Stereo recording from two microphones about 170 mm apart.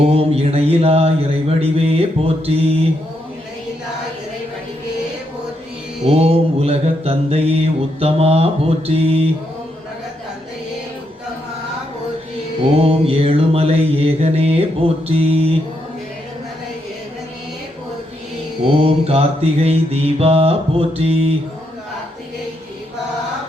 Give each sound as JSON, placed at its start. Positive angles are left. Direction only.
{"t": 0.1, "sound": "mantra", "side_deg": -35}
{"t": 6.1, "sound": "mantra", "side_deg": -35}
{"t": 12.7, "sound": "mantra", "side_deg": -35}
{"t": 18.8, "sound": "mantra", "side_deg": -35}